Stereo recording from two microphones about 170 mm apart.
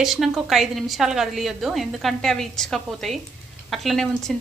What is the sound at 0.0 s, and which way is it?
A woman's voice, centre (ahead or behind).